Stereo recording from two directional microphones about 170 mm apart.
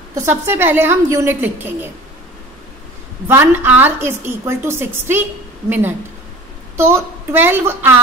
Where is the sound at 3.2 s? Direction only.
10° right (ahead or behind).